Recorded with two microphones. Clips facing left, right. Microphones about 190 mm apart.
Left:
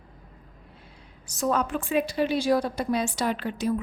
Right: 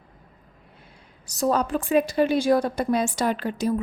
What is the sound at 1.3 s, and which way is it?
A woman's voice, 35° right (ahead or behind).